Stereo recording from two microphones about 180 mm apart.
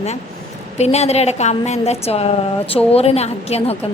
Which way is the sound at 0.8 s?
35° left (ahead or behind).